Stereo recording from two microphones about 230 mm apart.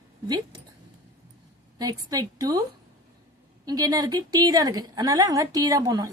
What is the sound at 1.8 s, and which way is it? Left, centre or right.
Speech, centre.